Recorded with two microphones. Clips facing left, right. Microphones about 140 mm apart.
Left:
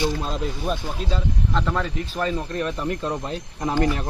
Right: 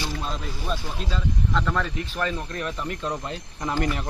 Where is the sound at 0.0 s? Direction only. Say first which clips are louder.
Left 6 dB; 25° left (ahead or behind).